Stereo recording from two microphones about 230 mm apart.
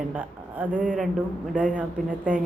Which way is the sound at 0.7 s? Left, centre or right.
Right.